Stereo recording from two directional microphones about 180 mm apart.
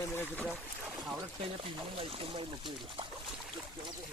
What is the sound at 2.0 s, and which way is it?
Speech, 30° right (ahead or behind).